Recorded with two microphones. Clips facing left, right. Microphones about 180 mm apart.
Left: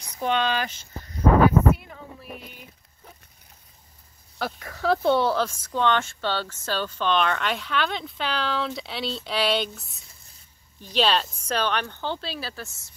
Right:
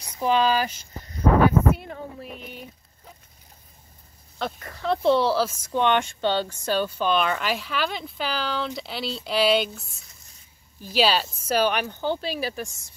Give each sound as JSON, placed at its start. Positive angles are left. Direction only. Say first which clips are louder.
{"t": 0.2, "sound": "speech", "louder": "right 3 dB", "side_deg": -5}
{"t": 4.4, "sound": "speech", "louder": "left 1 dB", "side_deg": 5}
{"t": 5.7, "sound": "speech", "louder": "right 1 dB", "side_deg": -15}